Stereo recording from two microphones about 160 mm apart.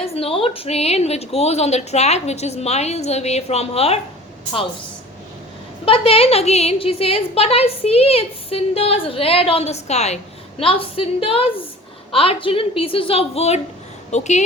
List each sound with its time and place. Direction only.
0.0 s a woman's voice: 40° left (ahead or behind)
5.8 s a woman's voice: 35° left (ahead or behind)